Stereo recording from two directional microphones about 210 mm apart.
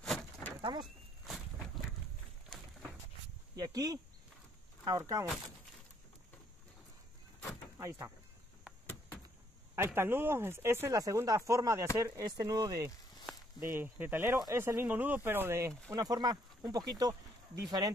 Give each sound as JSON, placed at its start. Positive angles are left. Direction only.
{"t": 0.0, "sound": "a sound", "side_deg": 5}
{"t": 0.6, "sound": "speech", "side_deg": -20}
{"t": 3.5, "sound": "speech", "side_deg": -20}
{"t": 9.8, "sound": "speech", "side_deg": -10}